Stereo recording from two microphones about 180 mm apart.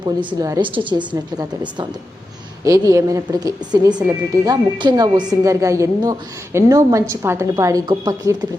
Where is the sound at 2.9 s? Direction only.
20° right (ahead or behind).